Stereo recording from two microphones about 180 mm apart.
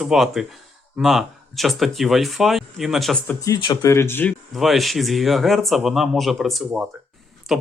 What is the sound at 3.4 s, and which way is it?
Speech, 20° left (ahead or behind).